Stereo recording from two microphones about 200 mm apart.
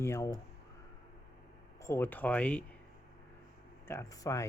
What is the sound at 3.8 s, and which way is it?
Speech, 15° left (ahead or behind).